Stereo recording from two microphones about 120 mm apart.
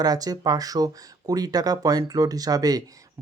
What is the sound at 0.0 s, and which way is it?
Speech, 30° right (ahead or behind).